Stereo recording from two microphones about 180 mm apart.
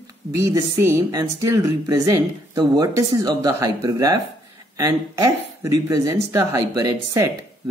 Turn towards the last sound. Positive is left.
turn(degrees=-20)  # may be behind; listen again after turning